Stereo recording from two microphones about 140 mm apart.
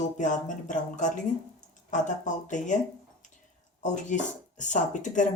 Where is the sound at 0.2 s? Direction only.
65° left (ahead or behind).